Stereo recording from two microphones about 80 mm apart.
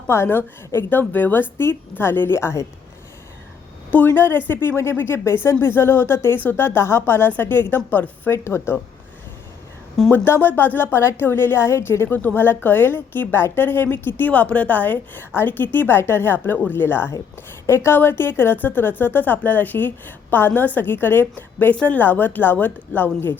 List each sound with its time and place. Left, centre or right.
0.1 s a woman's voice: left
3.9 s a woman's voice: left
8.3 s speech: left
10.1 s a woman's voice: left